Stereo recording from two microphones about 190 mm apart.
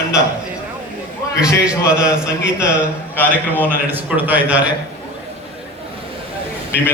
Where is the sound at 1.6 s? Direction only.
5° right (ahead or behind).